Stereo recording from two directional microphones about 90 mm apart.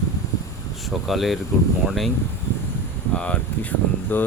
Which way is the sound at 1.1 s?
Centre (ahead or behind).